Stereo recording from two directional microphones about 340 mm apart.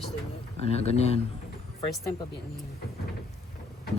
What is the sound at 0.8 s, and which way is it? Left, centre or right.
Speech, centre.